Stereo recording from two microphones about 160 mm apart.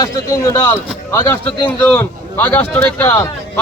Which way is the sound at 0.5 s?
20° left (ahead or behind).